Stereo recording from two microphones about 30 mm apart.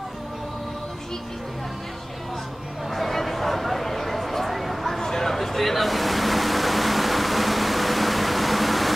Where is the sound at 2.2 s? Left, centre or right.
Centre.